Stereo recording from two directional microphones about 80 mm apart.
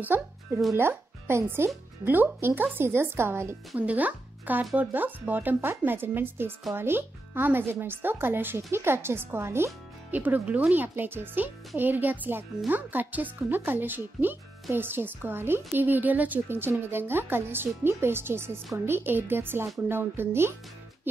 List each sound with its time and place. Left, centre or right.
0.0 s speech: right
3.7 s speech: centre
10.1 s speech: right